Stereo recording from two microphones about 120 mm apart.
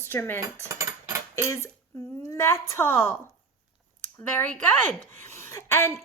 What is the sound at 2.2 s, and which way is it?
Speech, 20° left (ahead or behind).